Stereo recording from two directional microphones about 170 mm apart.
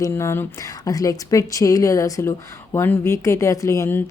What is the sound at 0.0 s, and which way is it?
Speech, 15° left (ahead or behind).